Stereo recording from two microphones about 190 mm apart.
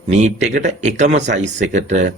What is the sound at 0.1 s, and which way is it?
Speech, 35° right (ahead or behind).